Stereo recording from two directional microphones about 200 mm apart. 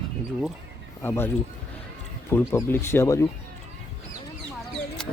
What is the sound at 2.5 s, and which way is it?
Speech, 10° left (ahead or behind).